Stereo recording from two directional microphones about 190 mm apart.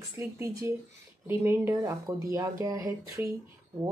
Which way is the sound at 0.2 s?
15° right (ahead or behind).